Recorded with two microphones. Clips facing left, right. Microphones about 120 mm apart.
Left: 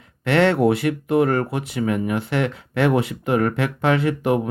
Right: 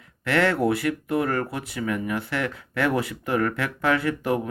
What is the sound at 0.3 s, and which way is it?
Speech, 25° left (ahead or behind).